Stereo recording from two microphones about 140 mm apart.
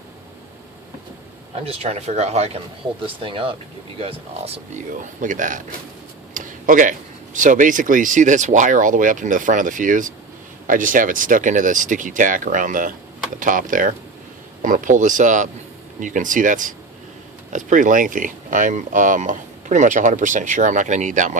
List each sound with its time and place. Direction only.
1.6 s speech: 45° right (ahead or behind)
3.2 s speech: 40° right (ahead or behind)
4.9 s speech: 65° right (ahead or behind)
6.3 s a sound: 70° right (ahead or behind)
7.3 s speech: 70° right (ahead or behind)